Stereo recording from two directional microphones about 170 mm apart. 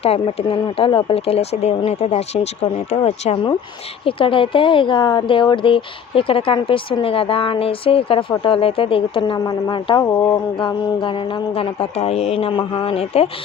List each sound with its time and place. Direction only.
0.0 s speech: 35° left (ahead or behind)